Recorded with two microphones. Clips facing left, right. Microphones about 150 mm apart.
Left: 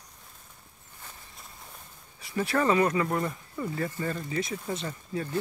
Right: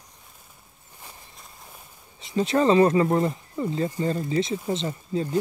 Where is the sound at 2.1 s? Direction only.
20° right (ahead or behind).